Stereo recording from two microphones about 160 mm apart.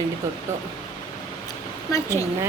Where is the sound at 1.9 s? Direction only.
20° left (ahead or behind).